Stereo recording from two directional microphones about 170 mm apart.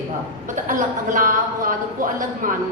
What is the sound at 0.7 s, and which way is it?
A woman's voice, 50° right (ahead or behind).